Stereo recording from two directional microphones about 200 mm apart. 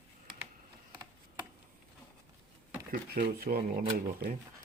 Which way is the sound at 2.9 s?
45° right (ahead or behind).